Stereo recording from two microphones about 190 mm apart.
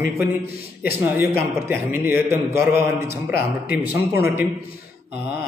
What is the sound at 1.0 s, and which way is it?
A man's voice, 10° right (ahead or behind).